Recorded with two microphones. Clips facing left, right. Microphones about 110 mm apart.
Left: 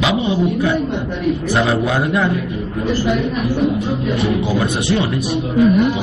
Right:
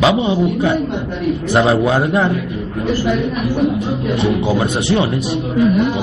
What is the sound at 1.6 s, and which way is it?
Speech, 30° right (ahead or behind).